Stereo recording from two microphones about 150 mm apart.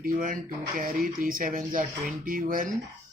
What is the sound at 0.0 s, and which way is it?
Speech, 65° right (ahead or behind).